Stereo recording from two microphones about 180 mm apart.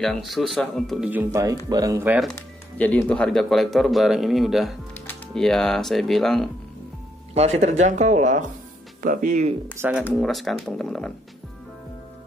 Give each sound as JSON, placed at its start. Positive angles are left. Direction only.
{"t": 0.0, "sound": "speech", "side_deg": 0}
{"t": 1.1, "sound": "speech", "side_deg": -15}
{"t": 2.8, "sound": "speech", "side_deg": 5}
{"t": 7.3, "sound": "speech", "side_deg": -40}
{"t": 9.8, "sound": "speech", "side_deg": -10}
{"t": 10.1, "sound": "speech", "side_deg": 0}